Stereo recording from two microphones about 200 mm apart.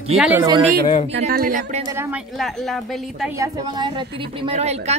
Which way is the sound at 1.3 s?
40° right (ahead or behind).